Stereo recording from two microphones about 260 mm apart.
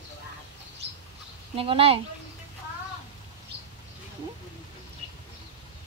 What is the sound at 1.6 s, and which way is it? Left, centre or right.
Speech, right.